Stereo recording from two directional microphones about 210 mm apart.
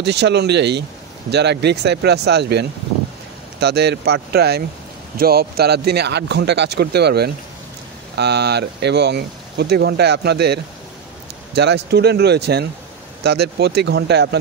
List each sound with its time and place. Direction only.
0.0 s speech: 55° right (ahead or behind)